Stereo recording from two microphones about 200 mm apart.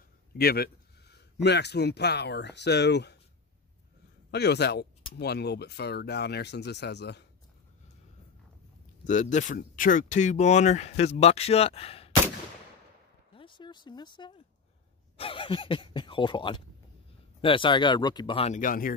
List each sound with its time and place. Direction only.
0.4 s speech: 50° left (ahead or behind)
4.3 s speech: 55° left (ahead or behind)
9.0 s speech: 40° left (ahead or behind)
13.3 s a sound: 25° left (ahead or behind)
15.1 s speech: 25° left (ahead or behind)
18.6 s speech: 45° left (ahead or behind)